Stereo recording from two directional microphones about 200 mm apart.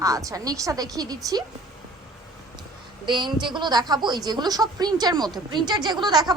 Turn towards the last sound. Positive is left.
turn(degrees=-20)  # may be behind; listen again after turning